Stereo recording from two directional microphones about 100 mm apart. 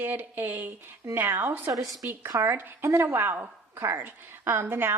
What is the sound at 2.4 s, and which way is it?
A woman's voice, 25° right (ahead or behind).